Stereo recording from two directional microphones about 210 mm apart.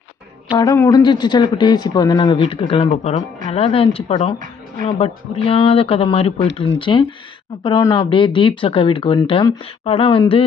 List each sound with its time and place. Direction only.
0.6 s speech: 15° left (ahead or behind)